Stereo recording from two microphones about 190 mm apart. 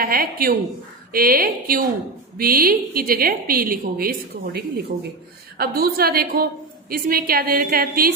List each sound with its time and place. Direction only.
0.0 s a woman's voice: 50° right (ahead or behind)